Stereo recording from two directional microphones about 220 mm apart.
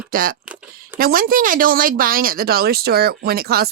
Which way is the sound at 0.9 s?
40° right (ahead or behind).